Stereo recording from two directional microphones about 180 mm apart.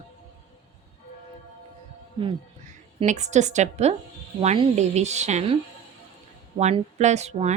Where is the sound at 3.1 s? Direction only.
40° right (ahead or behind).